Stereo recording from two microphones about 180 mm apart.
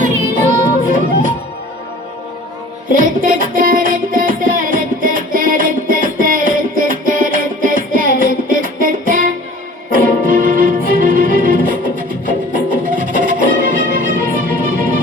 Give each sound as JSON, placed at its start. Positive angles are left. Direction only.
{"t": 0.9, "sound": "music", "side_deg": -45}
{"t": 2.9, "sound": "music", "side_deg": -50}